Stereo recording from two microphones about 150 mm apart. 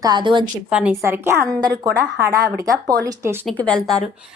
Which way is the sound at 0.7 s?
10° right (ahead or behind).